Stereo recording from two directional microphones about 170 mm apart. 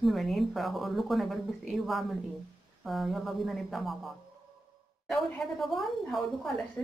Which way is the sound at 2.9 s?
Centre (ahead or behind).